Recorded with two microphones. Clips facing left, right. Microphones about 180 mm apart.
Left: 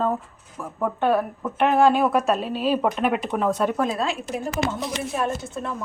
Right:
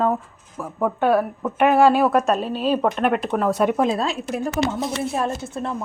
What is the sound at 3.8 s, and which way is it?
Speech, 35° right (ahead or behind).